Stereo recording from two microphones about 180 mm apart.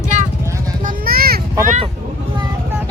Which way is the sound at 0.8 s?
50° right (ahead or behind).